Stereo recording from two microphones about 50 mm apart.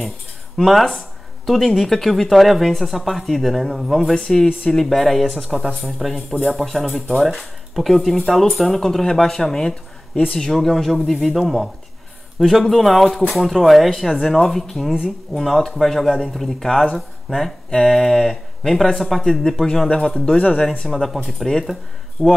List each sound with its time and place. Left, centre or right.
0.6 s speech: centre
20.8 s speech: centre
22.2 s speech: right